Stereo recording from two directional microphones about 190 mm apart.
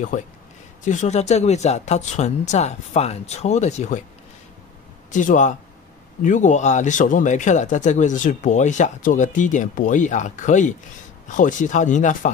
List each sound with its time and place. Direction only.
0.1 s speech: 40° left (ahead or behind)
5.1 s speech: 40° left (ahead or behind)